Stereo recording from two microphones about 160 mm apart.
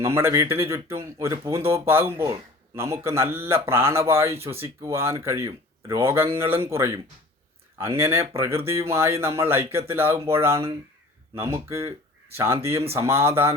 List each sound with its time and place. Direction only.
0.0 s speech: 15° right (ahead or behind)